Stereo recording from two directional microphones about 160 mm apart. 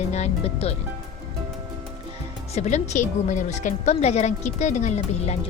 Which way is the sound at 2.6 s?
45° left (ahead or behind).